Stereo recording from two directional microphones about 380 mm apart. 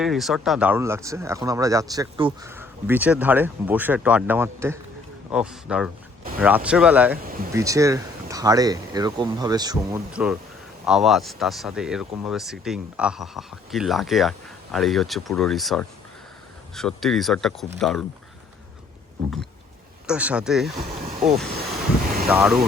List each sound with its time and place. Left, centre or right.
0.0 s speech: centre
20.1 s speech: centre
20.9 s a sound: centre
21.2 s speech: centre
21.5 s vehicle: right
22.3 s speech: centre